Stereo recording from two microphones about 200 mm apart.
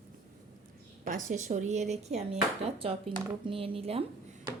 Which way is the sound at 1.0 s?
40° right (ahead or behind).